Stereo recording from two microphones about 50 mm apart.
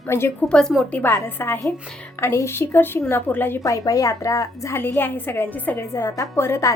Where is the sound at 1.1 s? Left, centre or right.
Left.